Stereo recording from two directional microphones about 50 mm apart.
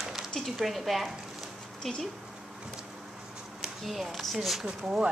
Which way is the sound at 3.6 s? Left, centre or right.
Centre.